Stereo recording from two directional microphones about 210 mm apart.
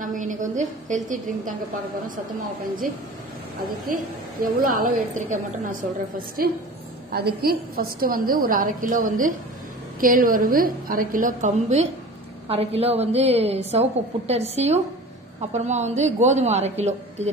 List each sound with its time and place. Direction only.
0.0 s a woman's voice: 40° right (ahead or behind)
3.9 s a woman's voice: 40° right (ahead or behind)